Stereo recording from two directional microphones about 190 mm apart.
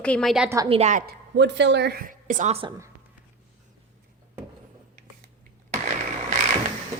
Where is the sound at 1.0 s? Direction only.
65° right (ahead or behind); by 2.7 s 35° right (ahead or behind).